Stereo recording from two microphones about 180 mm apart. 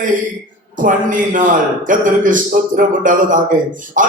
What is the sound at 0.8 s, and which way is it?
A man's voice, 45° right (ahead or behind).